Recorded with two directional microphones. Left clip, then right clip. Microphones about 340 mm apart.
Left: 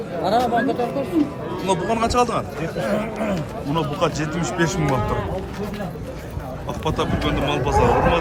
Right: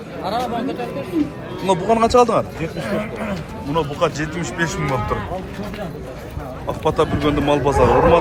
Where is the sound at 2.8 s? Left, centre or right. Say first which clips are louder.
Left 2 dB; left.